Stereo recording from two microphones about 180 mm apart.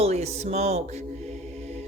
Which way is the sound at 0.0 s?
35° right (ahead or behind).